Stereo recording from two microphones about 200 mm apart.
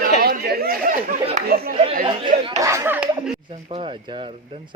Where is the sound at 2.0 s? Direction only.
25° right (ahead or behind); by 3.3 s 5° right (ahead or behind).